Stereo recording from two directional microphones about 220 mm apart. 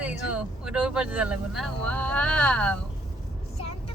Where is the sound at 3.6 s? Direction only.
25° left (ahead or behind).